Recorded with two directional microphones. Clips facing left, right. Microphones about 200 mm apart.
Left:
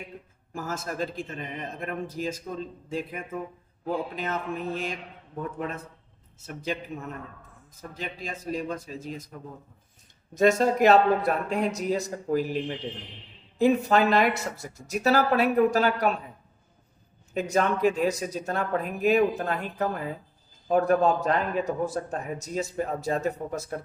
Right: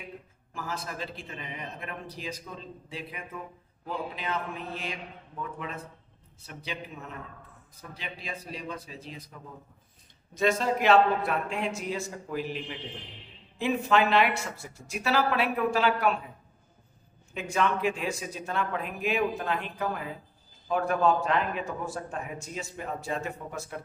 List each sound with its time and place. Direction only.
0.5 s a man's voice: 45° left (ahead or behind)
7.8 s a man's voice: 45° left (ahead or behind)
10.3 s a man's voice: 45° left (ahead or behind)
17.3 s a man's voice: 40° left (ahead or behind)